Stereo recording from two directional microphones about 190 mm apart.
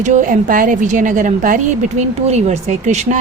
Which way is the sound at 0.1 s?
40° right (ahead or behind).